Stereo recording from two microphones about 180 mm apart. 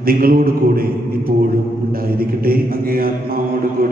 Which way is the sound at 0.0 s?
55° right (ahead or behind).